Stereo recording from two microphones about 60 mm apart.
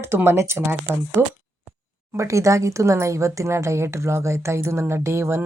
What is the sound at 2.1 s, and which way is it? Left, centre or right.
Speech, right.